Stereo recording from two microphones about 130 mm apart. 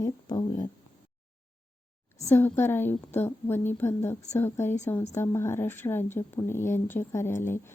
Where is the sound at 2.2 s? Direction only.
20° left (ahead or behind).